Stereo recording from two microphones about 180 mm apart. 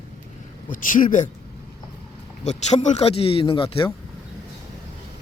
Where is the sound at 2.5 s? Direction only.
40° left (ahead or behind).